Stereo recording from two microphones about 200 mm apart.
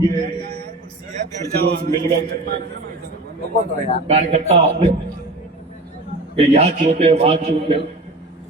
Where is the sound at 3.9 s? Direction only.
30° right (ahead or behind).